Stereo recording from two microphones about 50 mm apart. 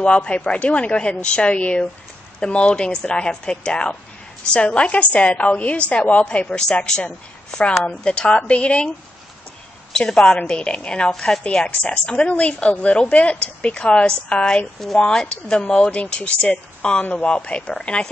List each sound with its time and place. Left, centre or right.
0.0 s a woman's voice: left
9.9 s a woman's voice: centre